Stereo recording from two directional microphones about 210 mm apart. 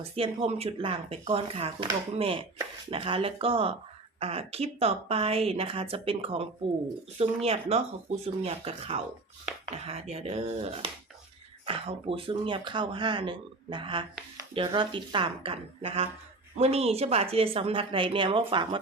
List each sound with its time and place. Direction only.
0.2 s speech: 25° right (ahead or behind)